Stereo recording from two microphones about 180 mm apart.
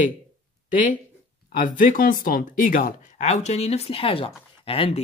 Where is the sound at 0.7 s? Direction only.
50° left (ahead or behind).